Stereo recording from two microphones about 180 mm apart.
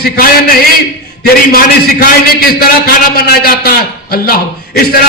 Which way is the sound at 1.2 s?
55° left (ahead or behind).